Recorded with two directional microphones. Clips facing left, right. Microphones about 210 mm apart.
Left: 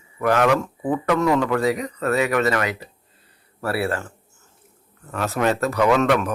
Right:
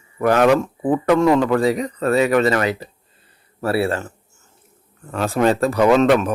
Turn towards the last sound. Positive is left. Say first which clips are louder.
# right 4 dB
turn(degrees=-25)  # may be behind; listen again after turning